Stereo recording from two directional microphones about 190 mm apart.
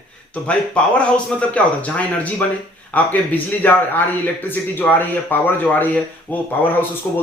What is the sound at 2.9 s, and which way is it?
A man's voice, 10° left (ahead or behind).